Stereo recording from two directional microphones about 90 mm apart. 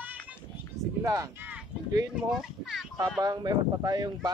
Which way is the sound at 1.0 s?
35° right (ahead or behind).